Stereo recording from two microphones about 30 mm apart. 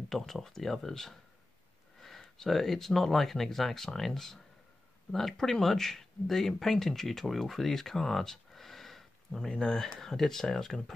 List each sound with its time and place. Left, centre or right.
0.1 s speech: centre
9.5 s speech: centre